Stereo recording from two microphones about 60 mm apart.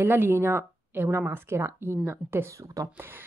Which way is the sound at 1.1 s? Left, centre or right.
Right.